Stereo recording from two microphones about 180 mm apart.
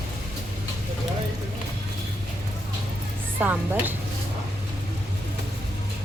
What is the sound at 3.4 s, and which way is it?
Speech, 10° right (ahead or behind).